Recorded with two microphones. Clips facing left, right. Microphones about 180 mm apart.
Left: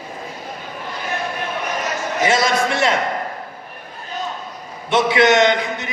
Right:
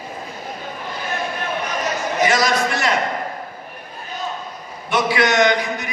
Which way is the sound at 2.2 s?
25° left (ahead or behind).